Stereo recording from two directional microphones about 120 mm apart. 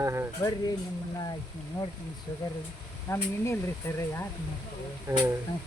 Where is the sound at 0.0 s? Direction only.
25° right (ahead or behind).